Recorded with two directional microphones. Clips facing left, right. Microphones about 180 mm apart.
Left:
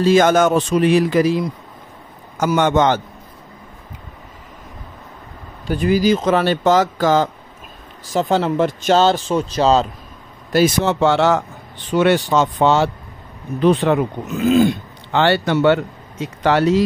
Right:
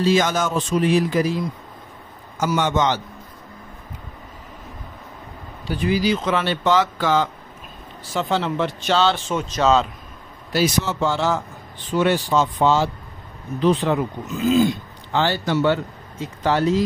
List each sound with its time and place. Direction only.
0.0 s speech: 55° left (ahead or behind); by 1.4 s 75° left (ahead or behind)
2.4 s speech: 55° left (ahead or behind)
5.7 s speech: 50° left (ahead or behind); by 9.8 s 35° left (ahead or behind)
10.5 s speech: 55° left (ahead or behind); by 16.8 s 75° left (ahead or behind)